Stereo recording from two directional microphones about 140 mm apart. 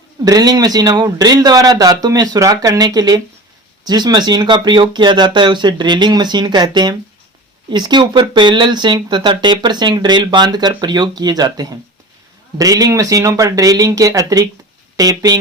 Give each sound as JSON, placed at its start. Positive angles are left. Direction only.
{"t": 0.3, "sound": "speech", "side_deg": -25}